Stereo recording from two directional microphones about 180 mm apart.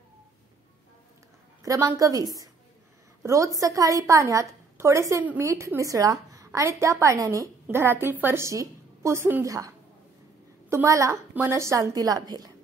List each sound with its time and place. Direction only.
1.6 s a woman's voice: 20° right (ahead or behind)